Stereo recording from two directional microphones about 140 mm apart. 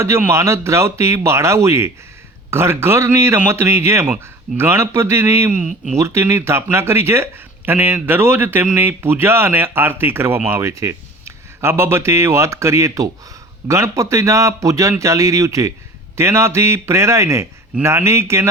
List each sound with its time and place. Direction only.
0.0 s a man's voice: 20° right (ahead or behind)